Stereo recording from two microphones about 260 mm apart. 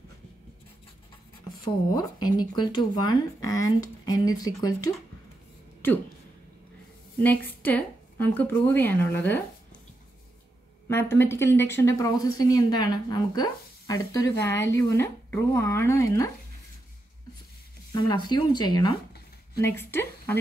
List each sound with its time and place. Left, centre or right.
2.2 s speech: centre
7.2 s speech: centre
10.9 s speech: centre
17.9 s a woman's voice: centre